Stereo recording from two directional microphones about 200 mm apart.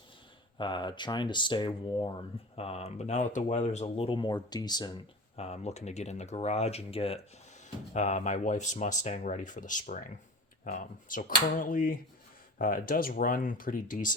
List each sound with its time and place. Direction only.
0.6 s speech: 25° left (ahead or behind)
5.4 s speech: 35° left (ahead or behind)